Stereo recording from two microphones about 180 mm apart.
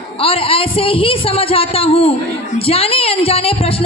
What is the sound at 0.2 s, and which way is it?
A woman's voice, 30° left (ahead or behind).